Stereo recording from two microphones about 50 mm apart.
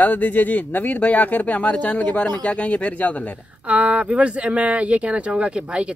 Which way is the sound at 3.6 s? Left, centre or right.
Right.